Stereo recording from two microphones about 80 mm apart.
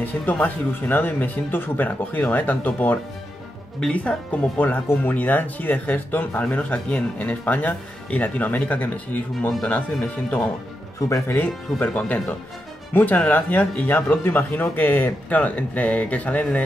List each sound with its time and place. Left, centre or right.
0.0 s speech: left
11.0 s speech: left
11.2 s speech: left